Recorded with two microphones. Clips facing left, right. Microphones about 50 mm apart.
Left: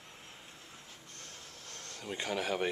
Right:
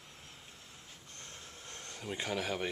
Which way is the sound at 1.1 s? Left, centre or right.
Right.